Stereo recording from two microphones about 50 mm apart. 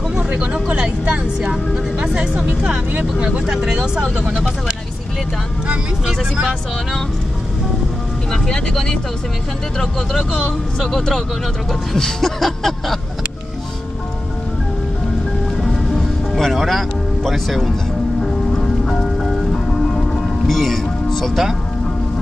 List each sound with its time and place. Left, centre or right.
0.3 s a sound: right
1.0 s speech: right
8.3 s speech: centre
15.6 s music: centre